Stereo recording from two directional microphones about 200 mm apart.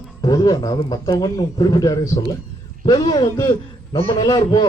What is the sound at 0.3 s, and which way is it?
A man's voice, 20° left (ahead or behind).